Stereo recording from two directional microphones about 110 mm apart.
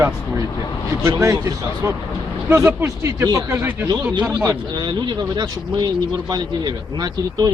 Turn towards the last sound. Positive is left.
turn(degrees=-40)  # may be behind; listen again after turning